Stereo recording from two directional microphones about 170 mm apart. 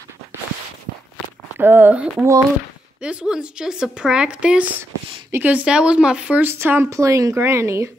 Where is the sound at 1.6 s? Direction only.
10° right (ahead or behind).